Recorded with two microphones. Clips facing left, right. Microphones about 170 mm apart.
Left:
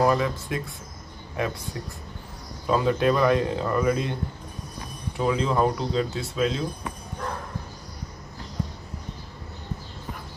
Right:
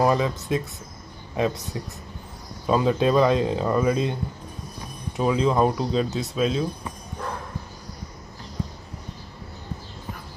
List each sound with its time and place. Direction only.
0.0 s speech: 20° right (ahead or behind)
2.6 s speech: 20° right (ahead or behind)
5.1 s speech: 20° right (ahead or behind)